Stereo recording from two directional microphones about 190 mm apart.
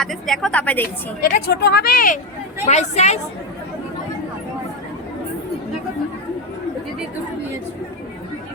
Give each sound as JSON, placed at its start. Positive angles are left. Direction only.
{"t": 0.0, "sound": "a woman's voice", "side_deg": 0}
{"t": 1.2, "sound": "speech", "side_deg": 60}
{"t": 2.6, "sound": "speech", "side_deg": 35}